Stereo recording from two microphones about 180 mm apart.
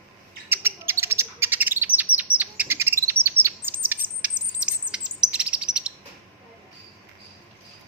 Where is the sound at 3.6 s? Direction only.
10° right (ahead or behind).